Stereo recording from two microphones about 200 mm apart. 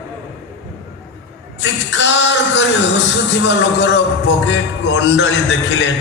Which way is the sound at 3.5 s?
60° left (ahead or behind).